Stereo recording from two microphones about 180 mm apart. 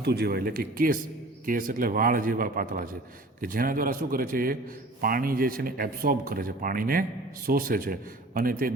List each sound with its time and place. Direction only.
0.0 s speech: 60° right (ahead or behind)